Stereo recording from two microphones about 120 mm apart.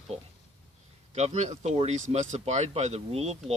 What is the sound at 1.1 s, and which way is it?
Speech, 70° right (ahead or behind).